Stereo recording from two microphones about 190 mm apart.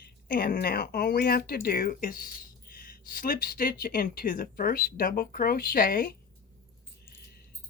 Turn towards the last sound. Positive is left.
turn(degrees=50)  # may be behind; listen again after turning